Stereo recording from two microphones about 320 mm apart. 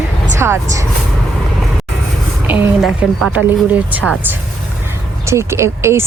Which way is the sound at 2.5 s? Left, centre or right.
Centre.